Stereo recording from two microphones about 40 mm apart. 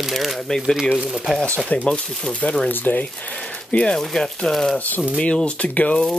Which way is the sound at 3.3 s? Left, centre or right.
Left.